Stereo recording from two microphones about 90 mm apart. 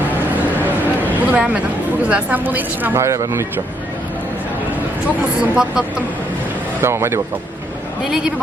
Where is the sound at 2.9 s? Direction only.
35° right (ahead or behind).